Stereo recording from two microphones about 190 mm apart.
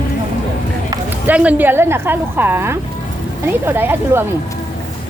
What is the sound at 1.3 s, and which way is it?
A woman's voice, 10° right (ahead or behind).